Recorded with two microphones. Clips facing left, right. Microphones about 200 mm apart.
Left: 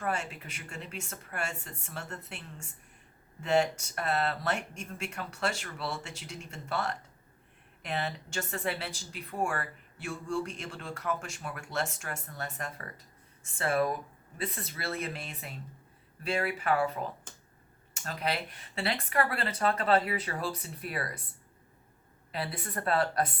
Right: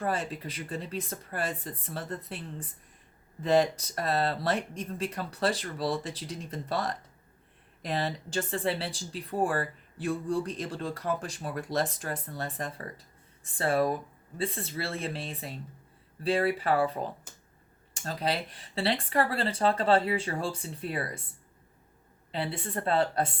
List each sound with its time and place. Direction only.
0.0 s speech: 35° right (ahead or behind)
22.3 s a woman's voice: 25° right (ahead or behind)